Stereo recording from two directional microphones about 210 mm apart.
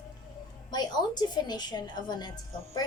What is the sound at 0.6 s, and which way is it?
A woman's voice, 20° left (ahead or behind).